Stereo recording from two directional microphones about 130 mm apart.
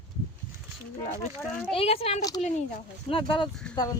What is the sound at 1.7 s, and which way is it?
Speech, 45° left (ahead or behind).